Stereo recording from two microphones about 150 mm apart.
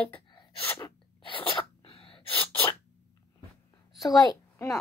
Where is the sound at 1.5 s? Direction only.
35° left (ahead or behind).